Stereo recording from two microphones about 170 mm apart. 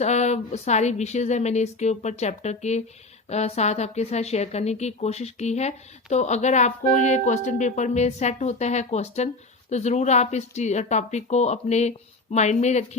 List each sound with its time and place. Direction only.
0.0 s a woman's voice: 40° left (ahead or behind)